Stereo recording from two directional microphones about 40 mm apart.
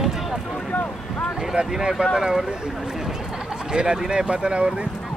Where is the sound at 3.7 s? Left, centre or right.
Right.